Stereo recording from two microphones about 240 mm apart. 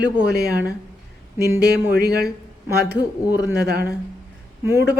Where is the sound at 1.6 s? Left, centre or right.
Right.